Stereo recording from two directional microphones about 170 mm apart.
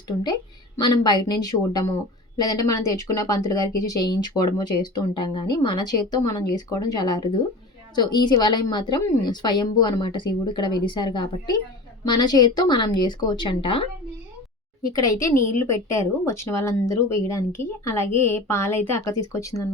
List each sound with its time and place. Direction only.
0.8 s a woman's voice: 25° left (ahead or behind)
15.4 s a woman's voice: 15° left (ahead or behind)